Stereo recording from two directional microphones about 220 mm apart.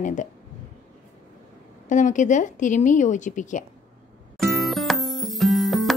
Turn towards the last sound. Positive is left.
turn(degrees=0)  # may be behind; listen again after turning